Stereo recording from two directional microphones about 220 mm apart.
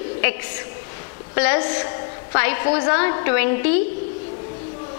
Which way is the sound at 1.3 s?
10° left (ahead or behind).